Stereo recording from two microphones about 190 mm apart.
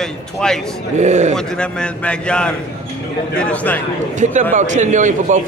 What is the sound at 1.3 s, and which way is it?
A man's voice, 5° left (ahead or behind).